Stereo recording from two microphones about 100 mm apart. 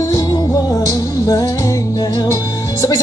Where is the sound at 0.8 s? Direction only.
35° left (ahead or behind).